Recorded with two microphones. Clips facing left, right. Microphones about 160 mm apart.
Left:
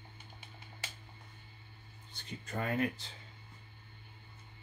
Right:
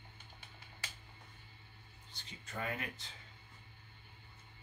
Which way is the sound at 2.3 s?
45° left (ahead or behind).